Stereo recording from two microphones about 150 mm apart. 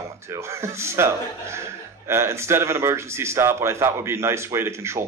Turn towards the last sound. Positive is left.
turn(degrees=-20)  # may be behind; listen again after turning